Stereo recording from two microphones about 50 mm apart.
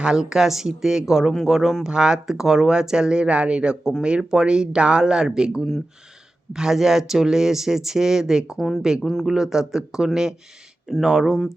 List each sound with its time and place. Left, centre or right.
0.0 s speech: centre
8.5 s speech: centre
9.2 s speech: centre